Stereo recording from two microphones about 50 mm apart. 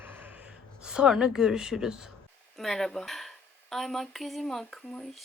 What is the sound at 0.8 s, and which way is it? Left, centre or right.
A woman's voice, centre.